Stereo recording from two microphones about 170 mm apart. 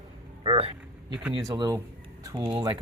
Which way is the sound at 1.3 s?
25° right (ahead or behind).